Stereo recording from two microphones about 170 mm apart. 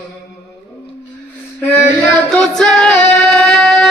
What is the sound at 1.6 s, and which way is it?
Female singing, 10° left (ahead or behind).